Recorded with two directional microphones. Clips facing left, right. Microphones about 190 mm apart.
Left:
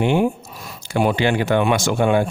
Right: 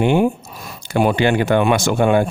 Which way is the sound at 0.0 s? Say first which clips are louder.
Right 2 dB; 50° right (ahead or behind).